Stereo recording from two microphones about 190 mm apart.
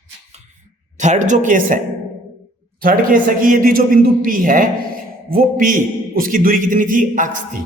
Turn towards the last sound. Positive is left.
turn(degrees=-45)  # may be behind; listen again after turning